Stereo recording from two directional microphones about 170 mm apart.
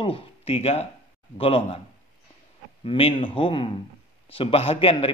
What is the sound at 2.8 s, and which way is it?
Speech, 35° left (ahead or behind).